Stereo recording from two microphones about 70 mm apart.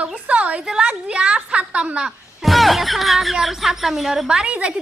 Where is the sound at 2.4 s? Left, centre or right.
Centre.